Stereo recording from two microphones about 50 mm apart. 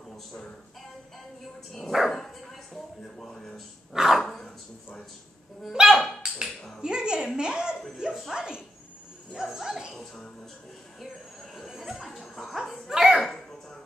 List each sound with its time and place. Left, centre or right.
1.7 s dog: centre
3.9 s dog: centre
5.6 s speech: centre
9.9 s speech: centre
11.5 s chuckle: centre
12.9 s a sound: centre
13.2 s a sound: centre